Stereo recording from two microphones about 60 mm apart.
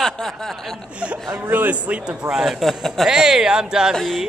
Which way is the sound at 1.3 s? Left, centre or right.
Right.